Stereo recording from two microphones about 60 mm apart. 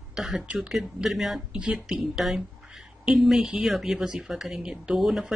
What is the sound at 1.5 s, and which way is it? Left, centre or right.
Speech, centre.